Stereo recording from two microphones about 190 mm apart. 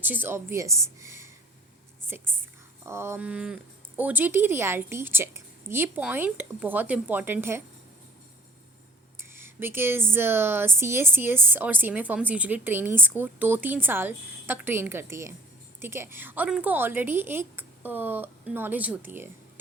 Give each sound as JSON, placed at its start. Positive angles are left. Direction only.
{"t": 0.0, "sound": "speech", "side_deg": -10}
{"t": 9.1, "sound": "speech", "side_deg": -10}